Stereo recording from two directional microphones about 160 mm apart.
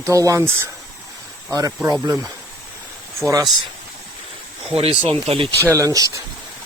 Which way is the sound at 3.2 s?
20° right (ahead or behind).